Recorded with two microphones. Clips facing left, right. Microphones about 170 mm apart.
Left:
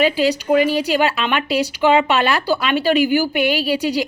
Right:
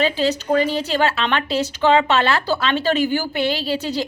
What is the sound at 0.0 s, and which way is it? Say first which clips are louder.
Speech: left 3 dB; 10° left (ahead or behind).